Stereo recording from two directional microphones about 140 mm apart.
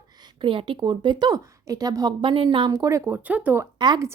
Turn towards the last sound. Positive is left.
turn(degrees=-30)  # may be behind; listen again after turning